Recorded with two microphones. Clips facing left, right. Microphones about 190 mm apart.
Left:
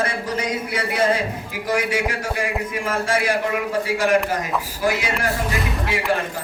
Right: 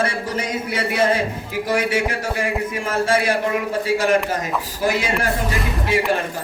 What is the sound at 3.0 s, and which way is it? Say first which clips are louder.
Speech: right 4 dB; 25° right (ahead or behind).